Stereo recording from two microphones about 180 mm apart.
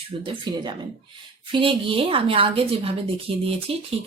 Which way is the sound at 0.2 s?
25° right (ahead or behind).